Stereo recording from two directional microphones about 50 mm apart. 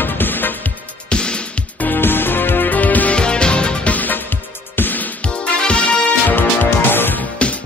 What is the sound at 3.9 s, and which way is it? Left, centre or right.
Music, left.